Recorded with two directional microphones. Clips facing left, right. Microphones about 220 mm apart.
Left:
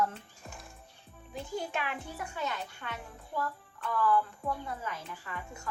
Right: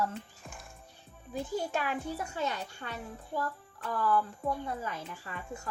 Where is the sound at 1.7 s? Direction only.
40° right (ahead or behind).